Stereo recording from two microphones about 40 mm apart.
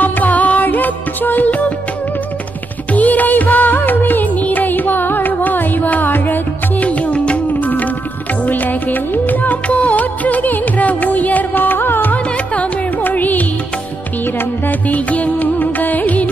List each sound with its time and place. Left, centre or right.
0.0 s music: left
2.9 s music of bollywood: left
6.1 s music: left
6.8 s music: left
7.6 s music: left
8.5 s music of bollywood: left
12.1 s music: left
14.9 s music: left